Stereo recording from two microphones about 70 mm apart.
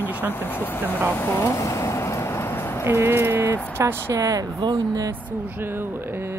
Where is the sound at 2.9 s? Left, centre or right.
Right.